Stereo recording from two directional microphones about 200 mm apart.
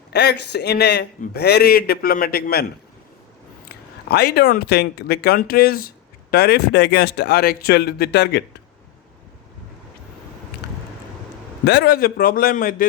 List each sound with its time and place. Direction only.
0.1 s speech: 55° left (ahead or behind)
3.7 s speech: 50° left (ahead or behind)
11.6 s speech: 55° left (ahead or behind)